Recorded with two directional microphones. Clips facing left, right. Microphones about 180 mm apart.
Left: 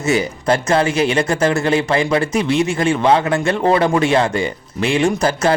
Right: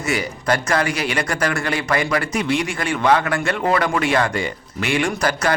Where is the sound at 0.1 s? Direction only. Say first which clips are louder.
Left 5 dB; 25° left (ahead or behind).